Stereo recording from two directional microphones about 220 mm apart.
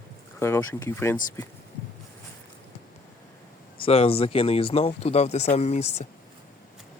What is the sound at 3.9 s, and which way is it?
Speech, 25° left (ahead or behind).